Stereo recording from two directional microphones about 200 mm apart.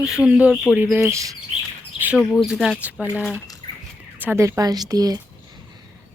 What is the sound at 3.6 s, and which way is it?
Bird, 20° left (ahead or behind).